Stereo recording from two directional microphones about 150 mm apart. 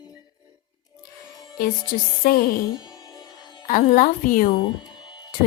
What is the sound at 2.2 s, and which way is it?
Music, 90° left.